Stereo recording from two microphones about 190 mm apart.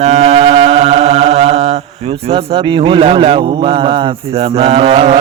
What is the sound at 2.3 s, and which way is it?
A man's voice, 25° right (ahead or behind).